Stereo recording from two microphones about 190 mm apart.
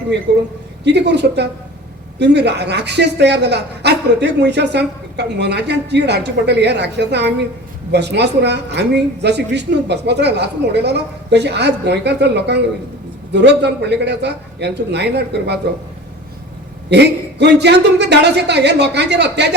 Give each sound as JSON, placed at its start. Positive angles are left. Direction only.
{"t": 0.3, "sound": "a man's voice", "side_deg": -65}
{"t": 16.9, "sound": "a man's voice", "side_deg": -60}